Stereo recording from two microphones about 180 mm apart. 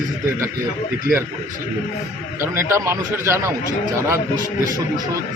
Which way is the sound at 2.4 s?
15° right (ahead or behind).